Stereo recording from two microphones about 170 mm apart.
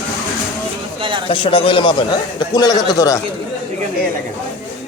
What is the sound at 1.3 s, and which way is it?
A man's voice, 30° left (ahead or behind).